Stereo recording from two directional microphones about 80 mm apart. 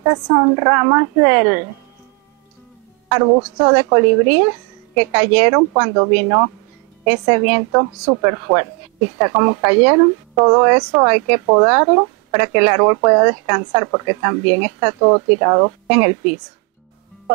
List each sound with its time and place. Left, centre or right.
0.0 s a woman's voice: right
3.1 s a woman's voice: right
3.7 s speech: right
7.7 s a woman's voice: right
10.3 s speech: right
11.4 s a woman's voice: right
11.7 s speech: right
15.2 s speech: right